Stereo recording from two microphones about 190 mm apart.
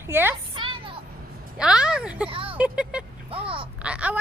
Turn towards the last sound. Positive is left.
turn(degrees=-5)  # may be behind; listen again after turning